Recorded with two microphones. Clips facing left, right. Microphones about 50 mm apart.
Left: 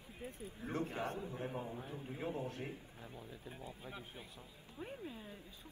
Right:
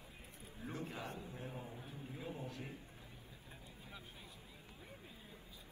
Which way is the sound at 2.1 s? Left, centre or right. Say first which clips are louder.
Left 6 dB; left.